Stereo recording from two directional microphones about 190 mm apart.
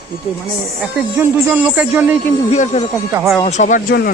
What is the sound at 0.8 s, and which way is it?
Speech, 10° right (ahead or behind).